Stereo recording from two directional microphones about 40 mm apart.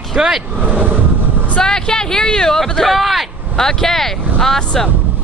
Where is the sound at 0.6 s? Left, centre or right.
Right.